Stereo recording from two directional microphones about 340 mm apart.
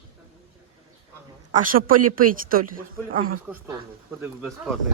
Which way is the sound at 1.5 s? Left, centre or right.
Right.